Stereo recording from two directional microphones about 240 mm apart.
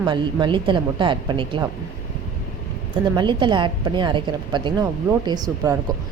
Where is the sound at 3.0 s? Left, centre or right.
Centre.